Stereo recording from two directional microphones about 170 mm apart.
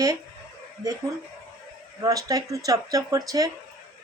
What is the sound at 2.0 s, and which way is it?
Speech, 20° right (ahead or behind).